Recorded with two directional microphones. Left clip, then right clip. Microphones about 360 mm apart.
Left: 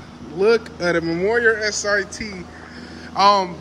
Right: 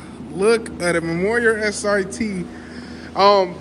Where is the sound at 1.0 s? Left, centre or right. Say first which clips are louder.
Even; right.